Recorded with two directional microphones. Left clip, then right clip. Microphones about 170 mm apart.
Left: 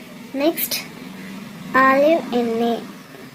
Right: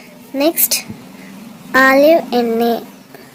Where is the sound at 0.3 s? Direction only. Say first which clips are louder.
Right 5 dB; 35° right (ahead or behind).